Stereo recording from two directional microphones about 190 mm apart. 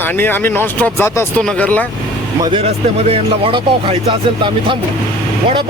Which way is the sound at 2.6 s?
30° right (ahead or behind).